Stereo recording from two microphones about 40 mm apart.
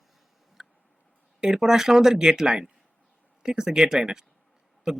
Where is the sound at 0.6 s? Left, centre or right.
Centre.